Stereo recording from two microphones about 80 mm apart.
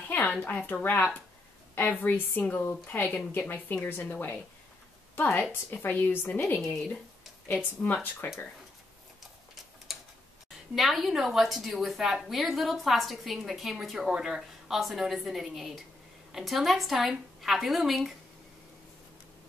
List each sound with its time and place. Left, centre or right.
0.1 s speech: centre
1.8 s a woman's voice: left
6.6 s a woman's voice: centre
7.4 s a woman's voice: left
9.9 s tick-tock: centre
10.7 s a woman's voice: centre